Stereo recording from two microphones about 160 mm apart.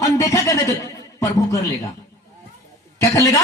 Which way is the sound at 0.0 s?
20° left (ahead or behind).